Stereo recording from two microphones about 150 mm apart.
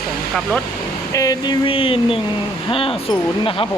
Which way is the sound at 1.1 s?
25° left (ahead or behind).